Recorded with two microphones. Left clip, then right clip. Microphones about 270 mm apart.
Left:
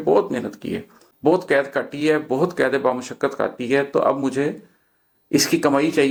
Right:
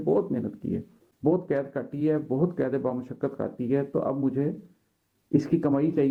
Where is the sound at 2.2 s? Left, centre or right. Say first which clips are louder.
Left 7 dB; left.